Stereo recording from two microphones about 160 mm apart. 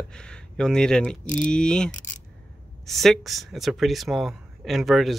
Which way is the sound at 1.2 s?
55° left (ahead or behind).